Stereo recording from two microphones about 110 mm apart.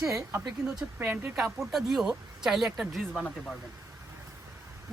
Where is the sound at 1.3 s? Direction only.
Centre (ahead or behind).